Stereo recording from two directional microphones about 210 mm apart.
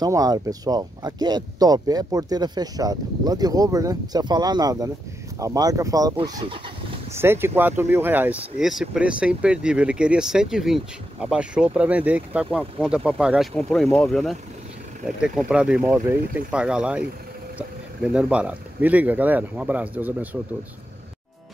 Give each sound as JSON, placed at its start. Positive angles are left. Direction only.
{"t": 0.0, "sound": "speech", "side_deg": -15}